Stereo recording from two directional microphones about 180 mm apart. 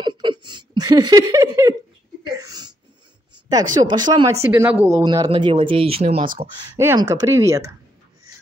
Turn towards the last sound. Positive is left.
turn(degrees=-20)  # may be behind; listen again after turning